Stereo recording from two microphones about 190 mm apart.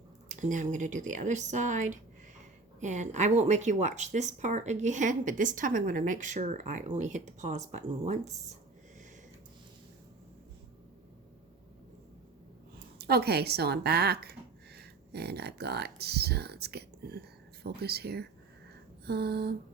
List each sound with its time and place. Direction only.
0.3 s speech: 40° right (ahead or behind)
13.0 s speech: 55° right (ahead or behind)